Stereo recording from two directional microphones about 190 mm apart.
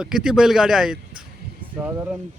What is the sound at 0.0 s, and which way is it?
Speech, 5° right (ahead or behind).